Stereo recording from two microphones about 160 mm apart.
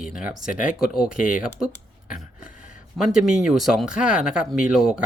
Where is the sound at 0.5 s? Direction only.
60° left (ahead or behind).